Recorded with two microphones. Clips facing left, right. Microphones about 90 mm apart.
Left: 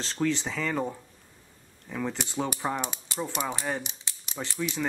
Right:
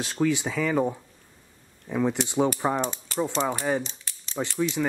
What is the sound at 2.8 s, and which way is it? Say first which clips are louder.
Mechanisms: right 6 dB; 15° left (ahead or behind).